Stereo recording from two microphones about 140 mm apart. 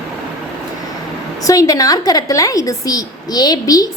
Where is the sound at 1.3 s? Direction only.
25° left (ahead or behind).